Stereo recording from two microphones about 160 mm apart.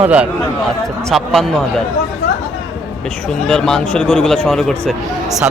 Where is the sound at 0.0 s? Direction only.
10° right (ahead or behind).